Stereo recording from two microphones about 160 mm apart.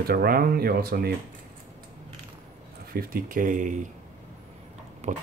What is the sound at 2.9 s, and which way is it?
Speech, 65° right (ahead or behind).